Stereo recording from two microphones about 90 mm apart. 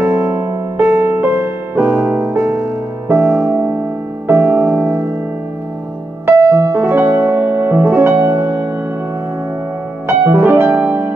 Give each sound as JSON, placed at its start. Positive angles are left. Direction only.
{"t": 0.0, "sound": "music", "side_deg": -25}
{"t": 6.7, "sound": "music", "side_deg": -25}
{"t": 10.0, "sound": "music", "side_deg": -20}